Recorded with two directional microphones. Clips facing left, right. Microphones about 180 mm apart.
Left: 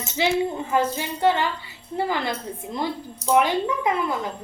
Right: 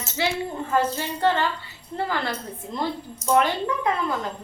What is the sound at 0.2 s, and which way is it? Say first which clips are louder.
A woman's voice: left 4 dB; 15° left (ahead or behind).